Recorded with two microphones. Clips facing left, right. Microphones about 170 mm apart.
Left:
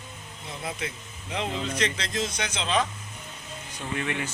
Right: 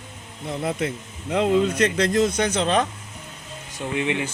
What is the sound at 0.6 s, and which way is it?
Speech, 55° right (ahead or behind).